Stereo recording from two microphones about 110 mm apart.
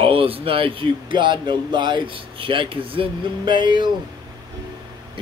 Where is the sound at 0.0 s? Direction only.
55° right (ahead or behind).